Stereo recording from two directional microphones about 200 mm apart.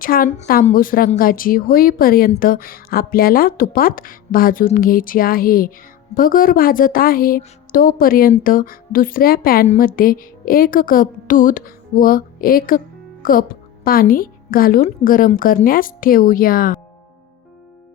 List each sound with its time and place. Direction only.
0.0 s a woman's voice: 45° left (ahead or behind)